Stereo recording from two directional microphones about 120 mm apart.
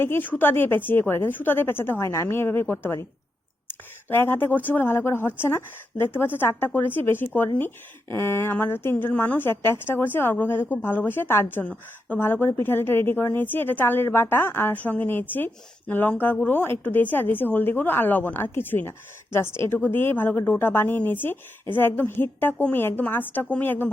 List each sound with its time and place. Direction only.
0.0 s a woman's voice: 15° left (ahead or behind)